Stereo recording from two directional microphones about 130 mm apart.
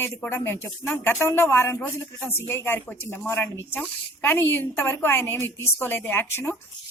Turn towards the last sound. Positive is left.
turn(degrees=15)  # may be behind; listen again after turning